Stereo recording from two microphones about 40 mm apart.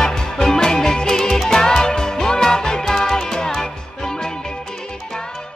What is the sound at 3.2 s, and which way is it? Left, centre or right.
Music, centre.